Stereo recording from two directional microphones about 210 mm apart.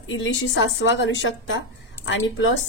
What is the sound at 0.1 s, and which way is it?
A woman's voice, 65° left (ahead or behind).